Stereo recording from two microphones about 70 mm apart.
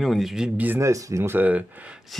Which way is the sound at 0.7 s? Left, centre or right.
Right.